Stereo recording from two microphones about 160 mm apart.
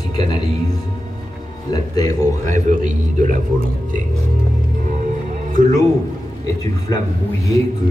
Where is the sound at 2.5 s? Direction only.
50° right (ahead or behind).